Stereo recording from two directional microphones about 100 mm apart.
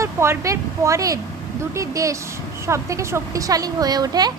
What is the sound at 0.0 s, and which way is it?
A woman's voice, 30° right (ahead or behind).